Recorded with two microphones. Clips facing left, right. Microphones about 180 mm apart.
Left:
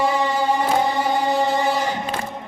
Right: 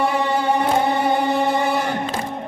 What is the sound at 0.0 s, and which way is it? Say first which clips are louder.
Music: even; 60° right (ahead or behind).